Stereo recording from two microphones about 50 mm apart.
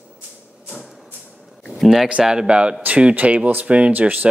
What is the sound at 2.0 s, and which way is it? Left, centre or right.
Speech, centre.